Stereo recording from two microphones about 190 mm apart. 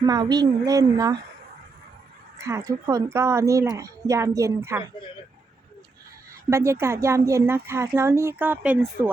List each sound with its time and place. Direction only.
0.0 s a woman's voice: 20° right (ahead or behind)
2.4 s a woman's voice: 15° right (ahead or behind)
6.5 s a woman's voice: 15° right (ahead or behind)